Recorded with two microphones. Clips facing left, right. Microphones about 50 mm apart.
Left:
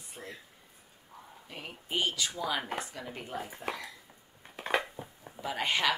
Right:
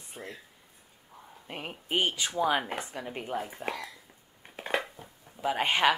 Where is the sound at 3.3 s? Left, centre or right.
Centre.